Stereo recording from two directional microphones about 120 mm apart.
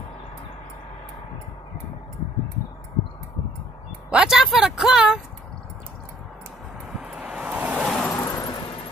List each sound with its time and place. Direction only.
4.1 s speech: 5° right (ahead or behind)
6.9 s vehicle: 10° right (ahead or behind)
7.8 s vehicle: centre (ahead or behind)
8.1 s vehicle: 25° left (ahead or behind)
8.5 s vehicle: 45° left (ahead or behind)